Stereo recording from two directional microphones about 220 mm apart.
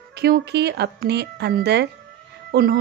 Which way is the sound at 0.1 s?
50° right (ahead or behind).